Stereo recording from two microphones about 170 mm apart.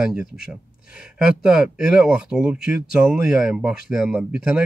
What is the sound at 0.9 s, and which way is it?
Speech, 5° right (ahead or behind).